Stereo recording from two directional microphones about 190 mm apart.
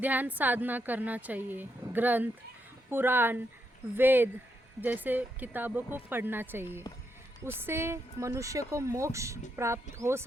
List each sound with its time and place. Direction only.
0.0 s speech: 10° right (ahead or behind)